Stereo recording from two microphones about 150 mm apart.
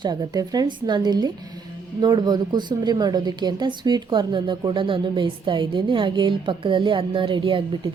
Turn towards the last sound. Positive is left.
turn(degrees=-35)  # may be behind; listen again after turning